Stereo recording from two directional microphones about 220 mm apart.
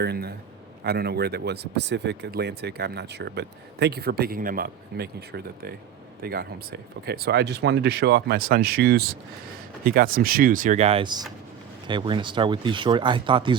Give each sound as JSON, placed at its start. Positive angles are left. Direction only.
{"t": 0.0, "sound": "speech", "side_deg": -45}